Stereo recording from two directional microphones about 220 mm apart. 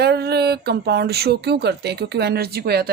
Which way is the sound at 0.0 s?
45° right (ahead or behind).